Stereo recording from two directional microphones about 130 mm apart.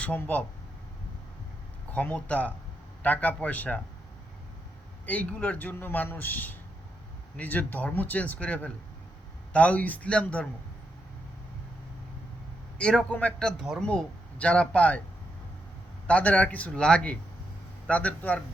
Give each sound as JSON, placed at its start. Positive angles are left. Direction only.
{"t": 0.0, "sound": "a man's voice", "side_deg": 10}
{"t": 1.9, "sound": "a man's voice", "side_deg": 10}
{"t": 5.0, "sound": "a man's voice", "side_deg": 10}
{"t": 12.8, "sound": "a man's voice", "side_deg": 5}
{"t": 16.0, "sound": "a man's voice", "side_deg": 10}